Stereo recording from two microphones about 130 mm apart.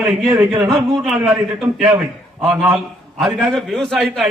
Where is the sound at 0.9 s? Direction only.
Centre (ahead or behind).